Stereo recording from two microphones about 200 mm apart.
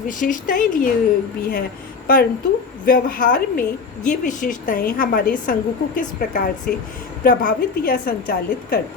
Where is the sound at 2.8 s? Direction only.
45° left (ahead or behind).